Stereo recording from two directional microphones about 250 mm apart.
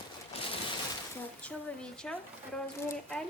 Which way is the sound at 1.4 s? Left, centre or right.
Centre.